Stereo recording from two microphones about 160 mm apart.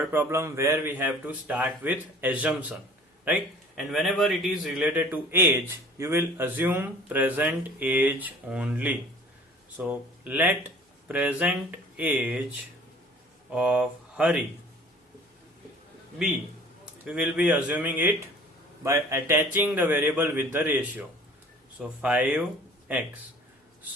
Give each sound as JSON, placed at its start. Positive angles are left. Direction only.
{"t": 0.0, "sound": "a man's voice", "side_deg": -10}
{"t": 13.5, "sound": "speech", "side_deg": -5}
{"t": 17.1, "sound": "a man's voice", "side_deg": -5}